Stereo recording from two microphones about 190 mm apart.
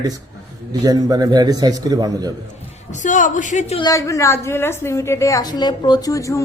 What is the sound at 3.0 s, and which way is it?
Speech, 40° left (ahead or behind).